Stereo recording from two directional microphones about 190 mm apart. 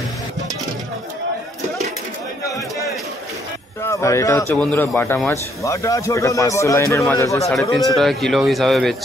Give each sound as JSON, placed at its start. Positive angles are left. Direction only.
{"t": 3.8, "sound": "a man's voice", "side_deg": 15}
{"t": 8.0, "sound": "speech", "side_deg": 0}